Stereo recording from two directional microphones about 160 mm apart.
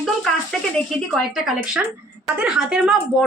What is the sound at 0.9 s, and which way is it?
A woman's voice, centre (ahead or behind).